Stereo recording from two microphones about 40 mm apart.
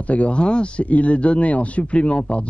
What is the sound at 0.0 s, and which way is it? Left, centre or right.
Speech, left.